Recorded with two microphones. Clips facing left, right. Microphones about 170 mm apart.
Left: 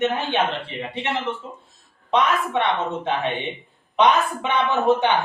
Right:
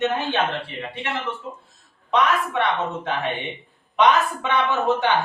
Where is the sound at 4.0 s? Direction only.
20° left (ahead or behind).